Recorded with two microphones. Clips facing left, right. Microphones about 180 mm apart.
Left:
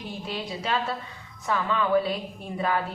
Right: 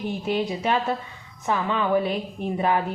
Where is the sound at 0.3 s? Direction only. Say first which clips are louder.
Right 4 dB; 20° right (ahead or behind).